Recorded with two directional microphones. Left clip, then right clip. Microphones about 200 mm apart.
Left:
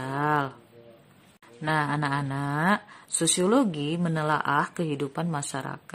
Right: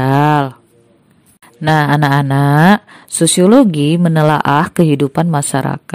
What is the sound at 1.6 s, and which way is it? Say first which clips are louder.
Speech: right 14 dB; 45° right (ahead or behind).